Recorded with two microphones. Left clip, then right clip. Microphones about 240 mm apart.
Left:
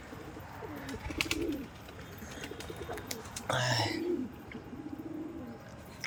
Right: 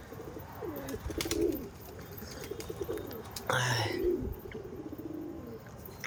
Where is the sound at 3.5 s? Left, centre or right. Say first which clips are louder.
Even; centre.